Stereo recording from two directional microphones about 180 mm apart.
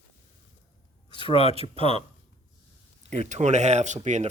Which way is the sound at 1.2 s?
25° left (ahead or behind).